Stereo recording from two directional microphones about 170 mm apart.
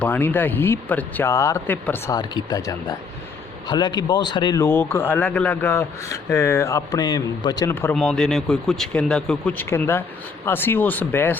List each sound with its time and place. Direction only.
0.0 s speech: 10° left (ahead or behind)
2.1 s speech: 20° left (ahead or behind)
7.9 s speech: 5° left (ahead or behind)